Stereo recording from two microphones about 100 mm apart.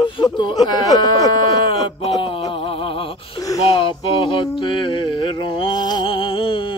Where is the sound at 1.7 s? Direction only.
65° left (ahead or behind).